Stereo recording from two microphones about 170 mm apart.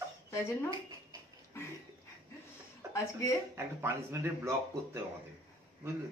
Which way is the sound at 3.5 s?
15° right (ahead or behind).